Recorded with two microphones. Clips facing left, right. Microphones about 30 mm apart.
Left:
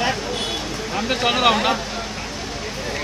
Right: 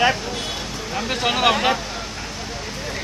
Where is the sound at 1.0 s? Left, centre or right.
Centre.